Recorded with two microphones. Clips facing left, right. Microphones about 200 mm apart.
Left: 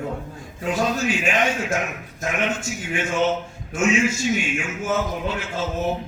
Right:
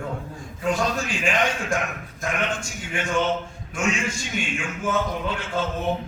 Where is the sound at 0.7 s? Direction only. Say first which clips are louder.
Left 3 dB; 5° left (ahead or behind).